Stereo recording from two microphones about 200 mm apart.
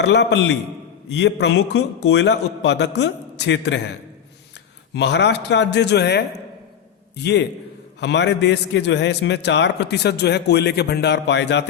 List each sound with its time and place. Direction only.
0.0 s a man's voice: 60° left (ahead or behind)
4.9 s a man's voice: 60° left (ahead or behind)